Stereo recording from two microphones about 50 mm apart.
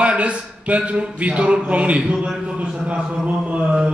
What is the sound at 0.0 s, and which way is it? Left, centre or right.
A man's voice, right.